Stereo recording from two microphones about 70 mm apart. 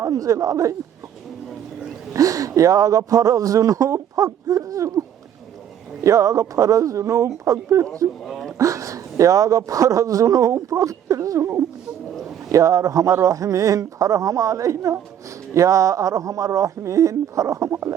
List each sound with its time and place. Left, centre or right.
0.1 s speech: right
2.1 s a man's voice: right
8.3 s a sound: centre
8.5 s speech: right